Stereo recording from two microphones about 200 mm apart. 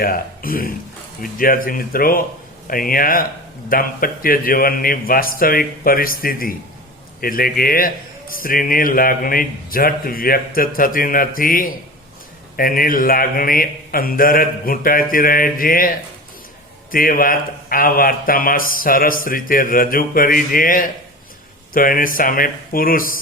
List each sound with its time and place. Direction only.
0.0 s a man's voice: 45° left (ahead or behind)